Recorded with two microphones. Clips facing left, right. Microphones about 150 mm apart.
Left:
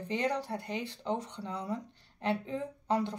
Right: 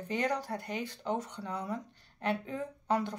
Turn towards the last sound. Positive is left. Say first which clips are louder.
# even
turn(degrees=25)  # may be behind; listen again after turning